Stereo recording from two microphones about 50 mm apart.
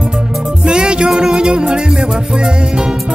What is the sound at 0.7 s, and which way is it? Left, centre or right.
Music, centre.